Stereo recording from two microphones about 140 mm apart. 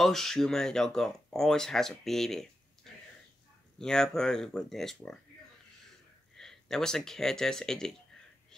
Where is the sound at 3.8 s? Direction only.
5° left (ahead or behind).